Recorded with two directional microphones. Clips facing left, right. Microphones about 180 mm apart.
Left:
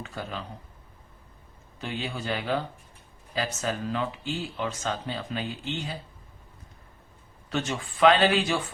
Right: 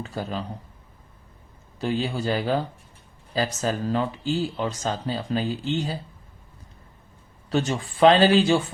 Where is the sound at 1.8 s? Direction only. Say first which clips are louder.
Right 8 dB; 35° right (ahead or behind).